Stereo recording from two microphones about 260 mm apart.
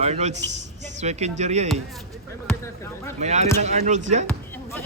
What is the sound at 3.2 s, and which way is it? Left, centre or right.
Speech, right.